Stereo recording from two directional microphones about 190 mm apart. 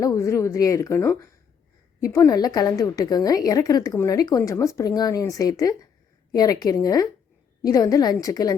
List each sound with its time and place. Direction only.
0.0 s a woman's voice: 15° left (ahead or behind)